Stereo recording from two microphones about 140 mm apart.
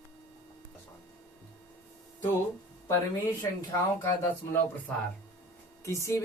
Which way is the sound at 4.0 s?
20° left (ahead or behind).